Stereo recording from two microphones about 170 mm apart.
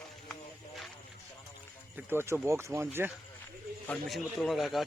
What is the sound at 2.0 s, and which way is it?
Speech, 15° right (ahead or behind).